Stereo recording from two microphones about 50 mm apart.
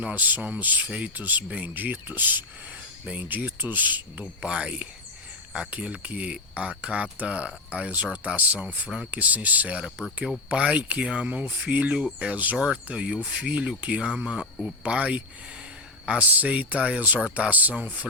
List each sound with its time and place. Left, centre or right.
0.0 s speech: right
1.2 s speech: right
1.5 s speech: right
1.7 s speech: right
4.2 s speech: centre
12.5 s speech: centre